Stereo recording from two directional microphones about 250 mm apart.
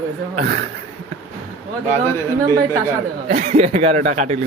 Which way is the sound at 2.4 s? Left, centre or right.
Centre.